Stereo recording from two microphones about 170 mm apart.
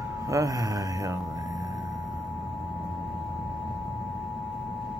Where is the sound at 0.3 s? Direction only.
20° right (ahead or behind).